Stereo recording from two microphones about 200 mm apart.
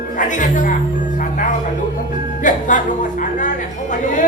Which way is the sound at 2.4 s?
40° left (ahead or behind).